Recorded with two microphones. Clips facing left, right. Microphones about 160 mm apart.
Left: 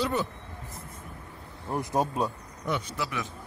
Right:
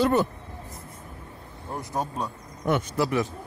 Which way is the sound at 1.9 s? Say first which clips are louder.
Left 3 dB; 10° left (ahead or behind).